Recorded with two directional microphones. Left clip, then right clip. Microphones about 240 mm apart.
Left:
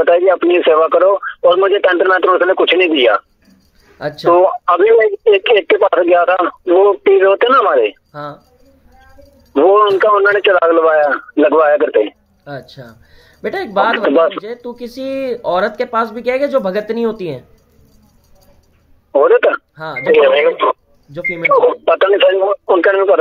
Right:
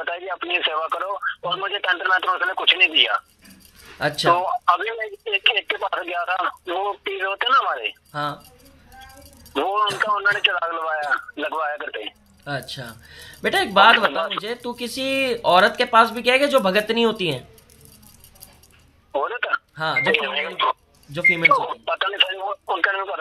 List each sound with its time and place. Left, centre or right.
0.0 s speech: centre
9.5 s speech: centre
19.1 s speech: centre